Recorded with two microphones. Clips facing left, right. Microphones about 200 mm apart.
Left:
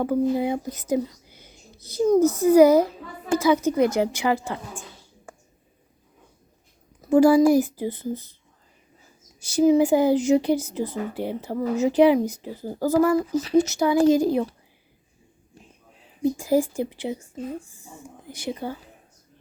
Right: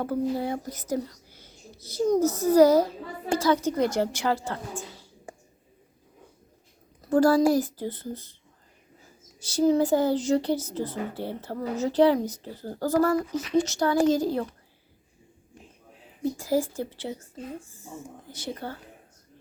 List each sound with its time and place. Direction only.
0.0 s a woman's voice: 15° left (ahead or behind)
7.1 s a woman's voice: 10° left (ahead or behind)
9.4 s a woman's voice: 10° left (ahead or behind)
13.1 s speech: 30° left (ahead or behind)
13.6 s a woman's voice: 10° left (ahead or behind)
16.2 s a woman's voice: 15° left (ahead or behind)
18.3 s a woman's voice: 10° left (ahead or behind)